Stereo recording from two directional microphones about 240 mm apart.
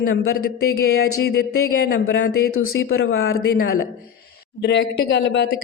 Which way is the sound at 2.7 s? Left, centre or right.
Left.